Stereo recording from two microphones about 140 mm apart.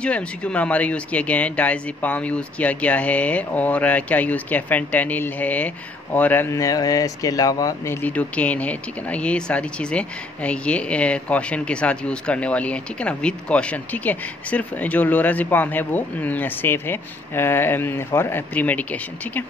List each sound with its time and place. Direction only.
0.0 s speech: 10° left (ahead or behind)